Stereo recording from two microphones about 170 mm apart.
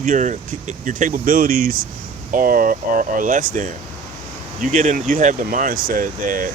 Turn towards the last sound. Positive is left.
turn(degrees=-50)  # may be behind; listen again after turning